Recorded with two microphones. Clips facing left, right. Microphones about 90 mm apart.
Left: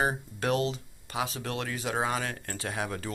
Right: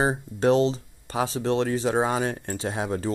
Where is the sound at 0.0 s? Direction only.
25° right (ahead or behind).